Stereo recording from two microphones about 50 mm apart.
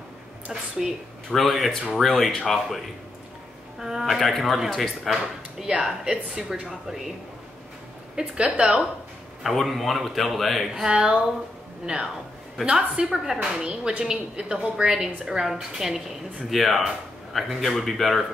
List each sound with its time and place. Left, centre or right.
0.5 s a woman's voice: centre
1.3 s speech: centre
3.8 s speech: centre
6.3 s a woman's voice: centre
6.7 s speech: centre
8.2 s a woman's voice: centre
9.4 s speech: centre
10.7 s a woman's voice: centre